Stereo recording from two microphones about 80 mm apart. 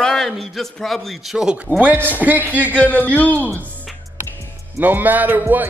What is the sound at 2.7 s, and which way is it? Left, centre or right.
Speech, left.